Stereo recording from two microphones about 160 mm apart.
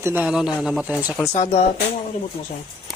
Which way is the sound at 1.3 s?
40° left (ahead or behind).